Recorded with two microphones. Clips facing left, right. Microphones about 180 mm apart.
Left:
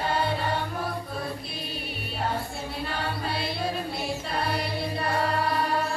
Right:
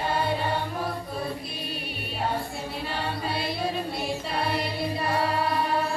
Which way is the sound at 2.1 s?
Centre (ahead or behind).